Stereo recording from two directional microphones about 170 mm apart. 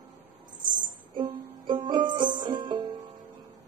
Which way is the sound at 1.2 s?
25° right (ahead or behind).